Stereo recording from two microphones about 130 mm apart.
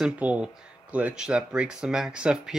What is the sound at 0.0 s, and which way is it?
Speech, 10° right (ahead or behind).